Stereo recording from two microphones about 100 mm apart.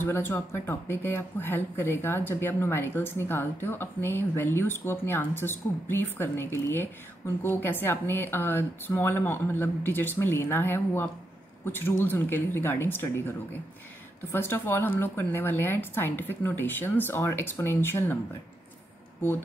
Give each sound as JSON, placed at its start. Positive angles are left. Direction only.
{"t": 0.0, "sound": "speech", "side_deg": 25}
{"t": 14.3, "sound": "speech", "side_deg": 20}